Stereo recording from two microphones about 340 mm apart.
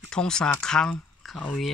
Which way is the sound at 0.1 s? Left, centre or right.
Centre.